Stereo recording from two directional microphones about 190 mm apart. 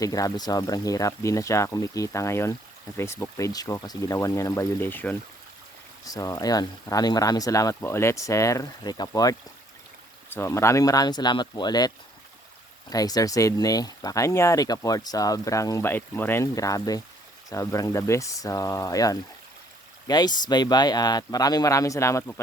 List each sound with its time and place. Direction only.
0.0 s speech: 20° left (ahead or behind)
10.3 s speech: 15° left (ahead or behind)
12.9 s speech: 20° left (ahead or behind)